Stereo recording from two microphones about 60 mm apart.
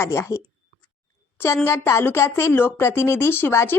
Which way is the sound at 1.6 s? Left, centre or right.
Left.